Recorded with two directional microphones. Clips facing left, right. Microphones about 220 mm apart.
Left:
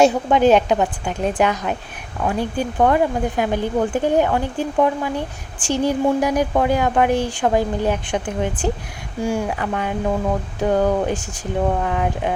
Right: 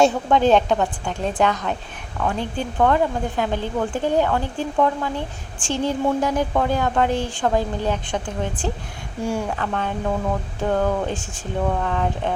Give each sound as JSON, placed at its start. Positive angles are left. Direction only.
{"t": 0.0, "sound": "speech", "side_deg": 15}